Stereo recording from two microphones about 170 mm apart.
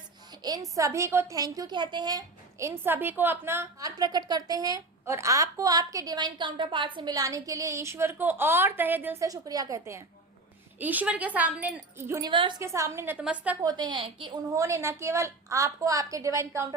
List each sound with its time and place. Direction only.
0.4 s a woman's voice: 20° right (ahead or behind)
12.3 s a woman's voice: 30° right (ahead or behind)
12.6 s speech: 15° right (ahead or behind)
13.6 s a woman's voice: 25° right (ahead or behind)
14.5 s a woman's voice: 20° right (ahead or behind)